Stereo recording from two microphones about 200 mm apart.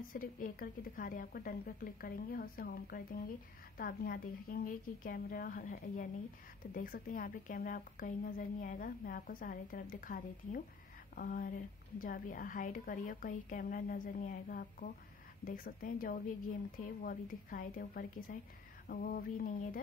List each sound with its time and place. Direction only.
0.0 s a woman's voice: 45° left (ahead or behind)